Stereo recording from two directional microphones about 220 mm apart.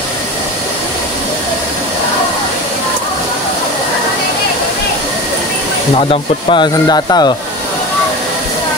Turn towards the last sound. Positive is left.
turn(degrees=20)  # may be behind; listen again after turning